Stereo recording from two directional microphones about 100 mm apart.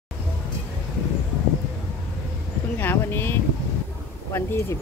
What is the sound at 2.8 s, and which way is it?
Speech, 20° left (ahead or behind).